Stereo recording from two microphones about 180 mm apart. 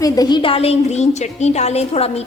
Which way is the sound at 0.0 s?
20° left (ahead or behind).